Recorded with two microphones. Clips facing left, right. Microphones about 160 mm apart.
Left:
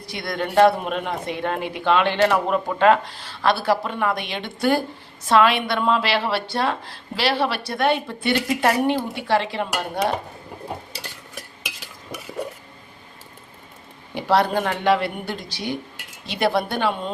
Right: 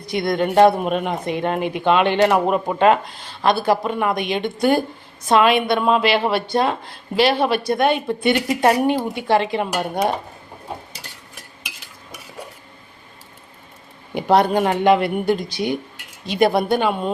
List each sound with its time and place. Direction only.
0.1 s speech: 20° right (ahead or behind)
14.2 s speech: 15° right (ahead or behind)